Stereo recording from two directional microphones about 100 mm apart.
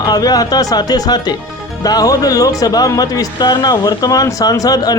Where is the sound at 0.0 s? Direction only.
40° left (ahead or behind).